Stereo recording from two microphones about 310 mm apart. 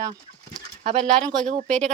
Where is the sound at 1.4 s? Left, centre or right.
Right.